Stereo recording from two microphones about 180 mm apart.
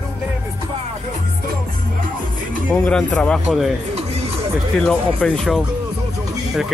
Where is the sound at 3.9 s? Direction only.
35° right (ahead or behind).